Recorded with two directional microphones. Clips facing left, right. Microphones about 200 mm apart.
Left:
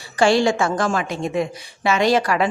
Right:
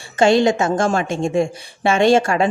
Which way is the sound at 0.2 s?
20° right (ahead or behind).